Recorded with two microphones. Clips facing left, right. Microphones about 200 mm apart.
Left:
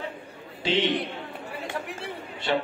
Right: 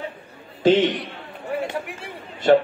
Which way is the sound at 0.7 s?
45° right (ahead or behind).